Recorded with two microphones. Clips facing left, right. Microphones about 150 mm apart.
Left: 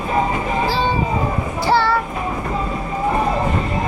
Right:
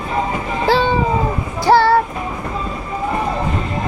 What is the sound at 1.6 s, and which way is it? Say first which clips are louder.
Child singing: right 5 dB; 45° right (ahead or behind).